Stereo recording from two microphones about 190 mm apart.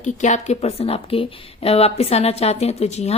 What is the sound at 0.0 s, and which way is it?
Speech, 40° left (ahead or behind).